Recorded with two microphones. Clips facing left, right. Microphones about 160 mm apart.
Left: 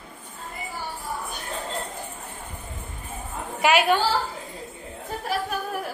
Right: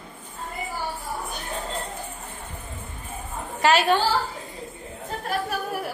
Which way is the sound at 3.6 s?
10° left (ahead or behind).